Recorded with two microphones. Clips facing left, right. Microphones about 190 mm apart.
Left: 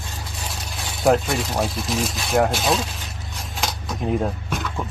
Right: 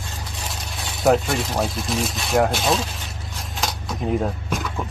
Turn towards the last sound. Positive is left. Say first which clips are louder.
# right 1 dB
turn(degrees=-5)  # may be behind; listen again after turning